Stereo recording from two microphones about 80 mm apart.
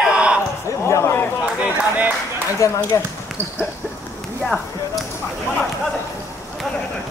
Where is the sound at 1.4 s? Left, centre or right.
Centre.